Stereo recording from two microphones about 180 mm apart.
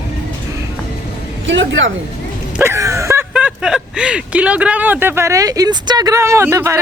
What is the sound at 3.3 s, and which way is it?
Speech, 5° right (ahead or behind).